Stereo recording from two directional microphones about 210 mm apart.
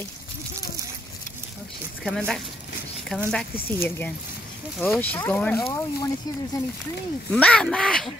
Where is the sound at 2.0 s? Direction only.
5° left (ahead or behind).